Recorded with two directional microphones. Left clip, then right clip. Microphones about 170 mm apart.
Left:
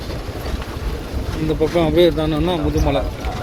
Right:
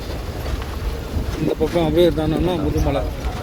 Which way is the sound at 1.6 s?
25° right (ahead or behind).